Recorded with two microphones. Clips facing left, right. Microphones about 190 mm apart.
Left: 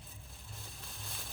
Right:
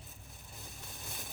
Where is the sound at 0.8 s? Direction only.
20° right (ahead or behind).